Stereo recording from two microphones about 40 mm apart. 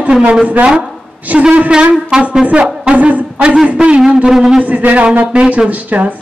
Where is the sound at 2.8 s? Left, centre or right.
Right.